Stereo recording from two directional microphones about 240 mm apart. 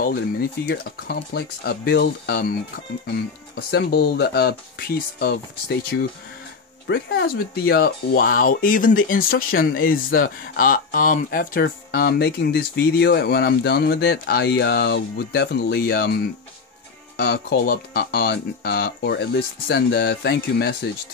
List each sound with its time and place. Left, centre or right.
0.0 s speech: left
7.2 s speech: left
17.2 s speech: left